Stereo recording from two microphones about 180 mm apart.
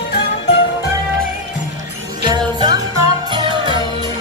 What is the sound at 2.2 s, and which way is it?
Jingle bell, 25° right (ahead or behind).